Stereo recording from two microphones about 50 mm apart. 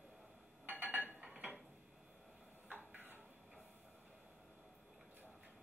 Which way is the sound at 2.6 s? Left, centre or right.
Right.